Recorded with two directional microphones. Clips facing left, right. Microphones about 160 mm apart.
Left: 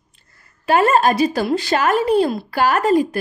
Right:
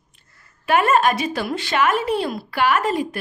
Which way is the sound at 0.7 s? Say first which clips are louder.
Left 2 dB; 30° left (ahead or behind).